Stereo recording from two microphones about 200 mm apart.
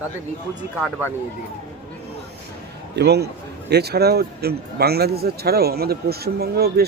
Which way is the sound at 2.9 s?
55° right (ahead or behind).